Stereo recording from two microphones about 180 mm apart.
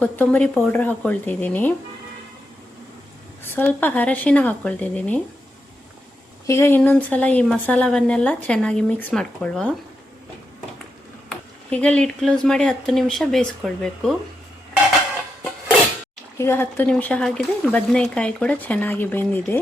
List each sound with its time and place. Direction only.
0.0 s speech: 5° left (ahead or behind)
3.4 s speech: 10° left (ahead or behind)
6.5 s speech: 15° left (ahead or behind)
11.3 s speech: 5° left (ahead or behind)
16.4 s speech: 10° left (ahead or behind)